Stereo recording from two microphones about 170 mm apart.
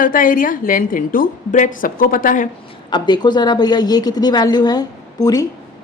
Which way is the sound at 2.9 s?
25° left (ahead or behind).